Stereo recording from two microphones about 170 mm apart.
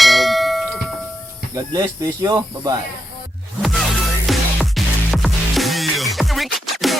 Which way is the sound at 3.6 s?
Centre (ahead or behind).